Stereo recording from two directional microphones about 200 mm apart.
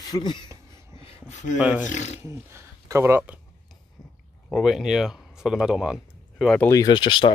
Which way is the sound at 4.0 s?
20° left (ahead or behind).